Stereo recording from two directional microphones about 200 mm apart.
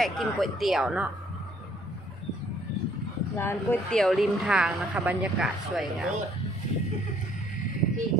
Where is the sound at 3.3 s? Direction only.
10° left (ahead or behind).